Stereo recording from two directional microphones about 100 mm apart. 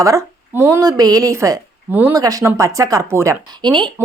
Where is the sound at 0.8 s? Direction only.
40° right (ahead or behind).